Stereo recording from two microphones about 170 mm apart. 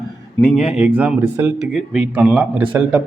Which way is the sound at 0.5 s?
Centre (ahead or behind).